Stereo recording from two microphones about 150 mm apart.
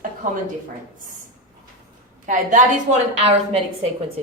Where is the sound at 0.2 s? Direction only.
60° right (ahead or behind).